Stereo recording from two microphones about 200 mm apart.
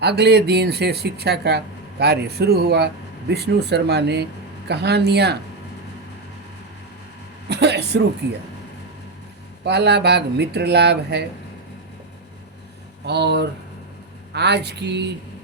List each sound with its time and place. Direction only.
0.0 s speech: 55° right (ahead or behind)
7.4 s speech: 55° right (ahead or behind)
9.6 s speech: 55° right (ahead or behind)
13.1 s speech: 55° right (ahead or behind)